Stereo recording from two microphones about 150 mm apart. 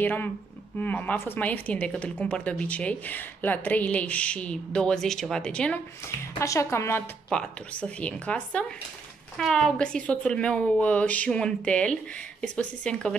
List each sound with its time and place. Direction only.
0.0 s a woman's voice: 15° left (ahead or behind)
6.4 s speech: 20° left (ahead or behind)
7.2 s a woman's voice: 5° left (ahead or behind)